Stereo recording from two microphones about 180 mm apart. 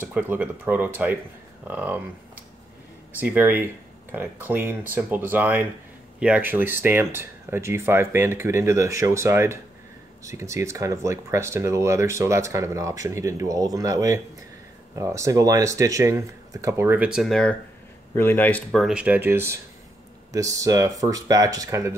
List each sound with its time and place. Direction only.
0.1 s speech: 10° right (ahead or behind)
3.2 s speech: 10° right (ahead or behind)